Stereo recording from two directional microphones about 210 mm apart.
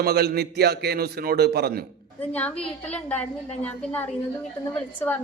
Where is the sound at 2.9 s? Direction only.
5° left (ahead or behind).